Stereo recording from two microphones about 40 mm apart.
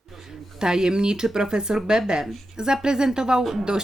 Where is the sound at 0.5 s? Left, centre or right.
Centre.